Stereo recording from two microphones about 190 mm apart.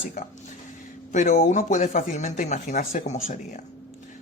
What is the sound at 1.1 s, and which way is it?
Speech, 40° left (ahead or behind).